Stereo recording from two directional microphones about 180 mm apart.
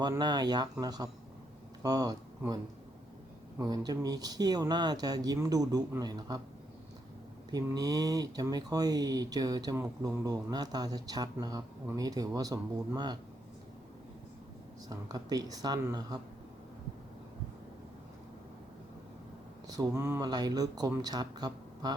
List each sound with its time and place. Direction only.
0.0 s speech: 25° right (ahead or behind)
3.6 s speech: 20° right (ahead or behind)
7.5 s speech: 20° right (ahead or behind)
14.8 s speech: 20° right (ahead or behind)
19.6 s speech: 20° right (ahead or behind)